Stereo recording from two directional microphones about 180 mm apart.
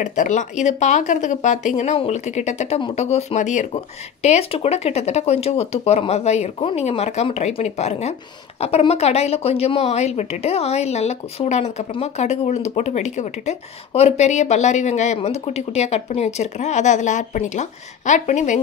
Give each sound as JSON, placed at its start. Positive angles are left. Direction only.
{"t": 0.0, "sound": "speech", "side_deg": 45}